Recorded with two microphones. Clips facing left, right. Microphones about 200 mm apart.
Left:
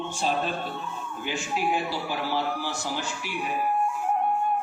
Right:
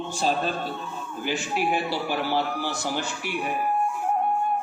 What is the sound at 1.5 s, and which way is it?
A man's voice, 70° right (ahead or behind).